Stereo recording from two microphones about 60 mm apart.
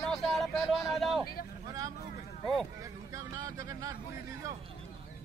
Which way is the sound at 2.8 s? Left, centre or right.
Right.